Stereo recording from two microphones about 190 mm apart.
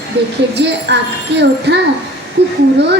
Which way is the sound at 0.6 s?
65° right (ahead or behind).